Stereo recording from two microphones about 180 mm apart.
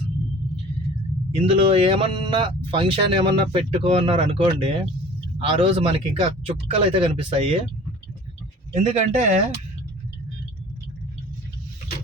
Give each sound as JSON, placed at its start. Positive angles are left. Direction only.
{"t": 1.4, "sound": "speech", "side_deg": -30}
{"t": 8.7, "sound": "speech", "side_deg": -40}